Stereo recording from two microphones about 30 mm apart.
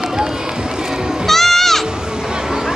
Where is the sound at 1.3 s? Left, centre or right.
Centre.